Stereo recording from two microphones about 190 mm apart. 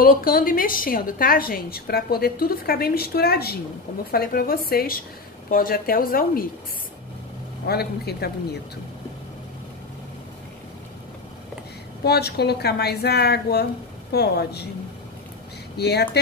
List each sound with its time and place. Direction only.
0.0 s a woman's voice: 50° left (ahead or behind)
7.6 s speech: 55° left (ahead or behind)
12.0 s speech: 60° left (ahead or behind)
15.8 s speech: 60° left (ahead or behind)